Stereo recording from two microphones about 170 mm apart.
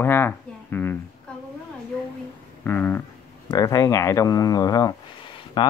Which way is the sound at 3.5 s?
20° left (ahead or behind).